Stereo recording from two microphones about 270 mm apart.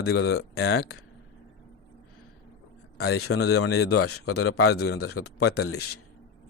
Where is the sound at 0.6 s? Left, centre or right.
Left.